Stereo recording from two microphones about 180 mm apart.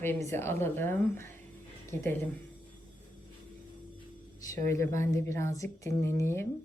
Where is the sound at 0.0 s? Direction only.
15° left (ahead or behind).